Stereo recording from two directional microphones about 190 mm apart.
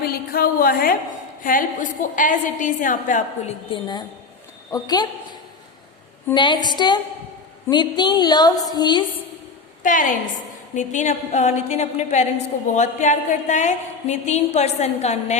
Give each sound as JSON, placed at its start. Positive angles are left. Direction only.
{"t": 0.0, "sound": "a sound", "side_deg": 55}
{"t": 1.5, "sound": "a woman's voice", "side_deg": 45}
{"t": 3.7, "sound": "a woman's voice", "side_deg": 25}
{"t": 9.8, "sound": "a woman's voice", "side_deg": 45}